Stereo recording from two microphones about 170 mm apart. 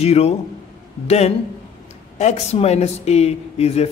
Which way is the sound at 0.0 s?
40° left (ahead or behind).